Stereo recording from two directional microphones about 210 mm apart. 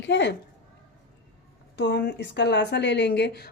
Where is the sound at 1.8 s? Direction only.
55° left (ahead or behind).